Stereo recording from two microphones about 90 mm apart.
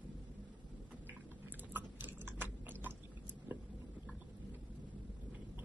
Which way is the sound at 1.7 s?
20° right (ahead or behind).